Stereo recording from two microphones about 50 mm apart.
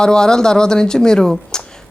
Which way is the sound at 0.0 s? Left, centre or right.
Centre.